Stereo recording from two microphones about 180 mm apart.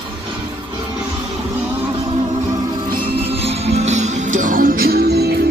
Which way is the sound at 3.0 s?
30° right (ahead or behind).